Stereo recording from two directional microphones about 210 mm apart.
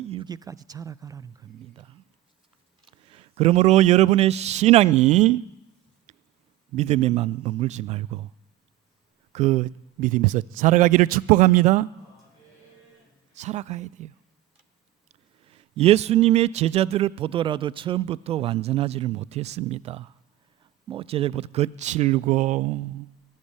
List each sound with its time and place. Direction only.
0.1 s speech: 20° right (ahead or behind)
3.1 s a man's voice: 30° right (ahead or behind)
6.1 s a sound: 35° right (ahead or behind)
6.7 s a man's voice: 30° right (ahead or behind)
9.3 s a man's voice: 35° right (ahead or behind)
13.4 s a man's voice: 35° right (ahead or behind)
15.1 s a man's voice: 30° right (ahead or behind)